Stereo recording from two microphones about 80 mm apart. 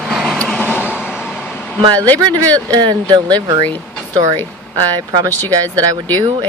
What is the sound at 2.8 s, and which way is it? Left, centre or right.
Speech, right.